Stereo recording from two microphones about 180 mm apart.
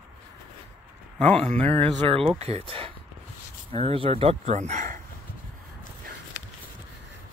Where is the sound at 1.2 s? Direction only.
5° left (ahead or behind).